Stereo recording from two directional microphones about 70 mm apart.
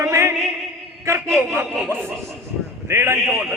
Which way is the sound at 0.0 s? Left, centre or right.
Right.